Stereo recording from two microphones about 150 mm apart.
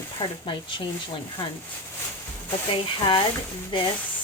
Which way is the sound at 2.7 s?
30° left (ahead or behind).